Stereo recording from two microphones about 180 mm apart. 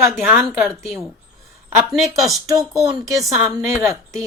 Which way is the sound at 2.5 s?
20° right (ahead or behind).